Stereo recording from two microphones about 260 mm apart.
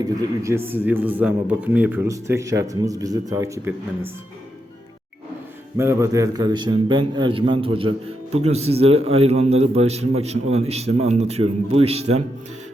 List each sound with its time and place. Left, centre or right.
0.0 s a man's voice: centre
5.7 s a man's voice: centre